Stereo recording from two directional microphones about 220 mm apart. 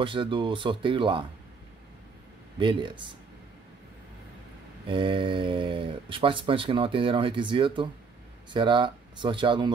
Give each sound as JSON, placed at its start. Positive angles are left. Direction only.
{"t": 0.0, "sound": "speech", "side_deg": -20}
{"t": 2.6, "sound": "speech", "side_deg": -20}
{"t": 4.8, "sound": "speech", "side_deg": -25}